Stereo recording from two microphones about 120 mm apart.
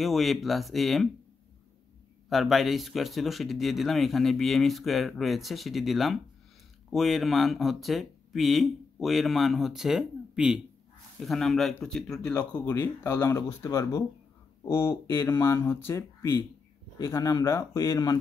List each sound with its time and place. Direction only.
0.0 s speech: centre (ahead or behind)
2.2 s speech: centre (ahead or behind)
12.3 s speech: 15° left (ahead or behind)
12.7 s speech: 30° left (ahead or behind)